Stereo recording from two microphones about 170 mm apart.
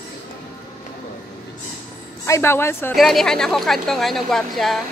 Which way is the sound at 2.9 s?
Centre (ahead or behind).